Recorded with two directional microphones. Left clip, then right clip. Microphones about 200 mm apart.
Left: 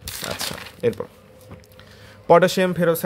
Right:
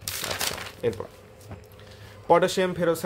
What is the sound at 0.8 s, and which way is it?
Speech, 30° left (ahead or behind).